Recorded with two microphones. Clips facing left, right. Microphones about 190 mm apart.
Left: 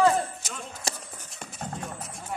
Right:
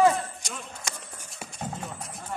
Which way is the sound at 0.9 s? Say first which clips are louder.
Left 5 dB; 30° left (ahead or behind).